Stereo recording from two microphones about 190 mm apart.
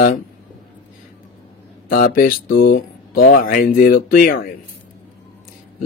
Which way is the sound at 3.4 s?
50° left (ahead or behind).